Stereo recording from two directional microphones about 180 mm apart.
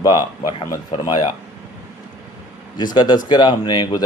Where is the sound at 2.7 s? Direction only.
25° left (ahead or behind).